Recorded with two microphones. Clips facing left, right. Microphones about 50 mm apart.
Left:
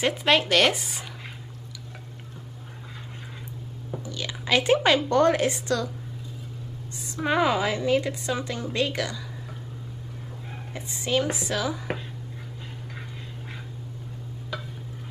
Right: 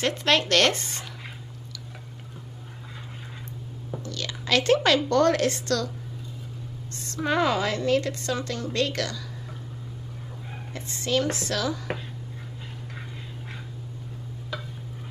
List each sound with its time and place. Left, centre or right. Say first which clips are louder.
0.0 s a woman's voice: left 1 dB; centre
4.0 s a woman's voice: even; centre
7.2 s a woman's voice: left 1 dB; centre
10.7 s a woman's voice: even; centre